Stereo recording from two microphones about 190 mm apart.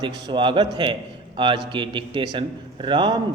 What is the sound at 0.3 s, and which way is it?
A man's voice, 25° right (ahead or behind).